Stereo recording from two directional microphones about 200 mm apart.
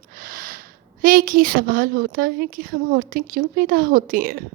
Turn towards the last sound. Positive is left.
turn(degrees=-45)  # may be behind; listen again after turning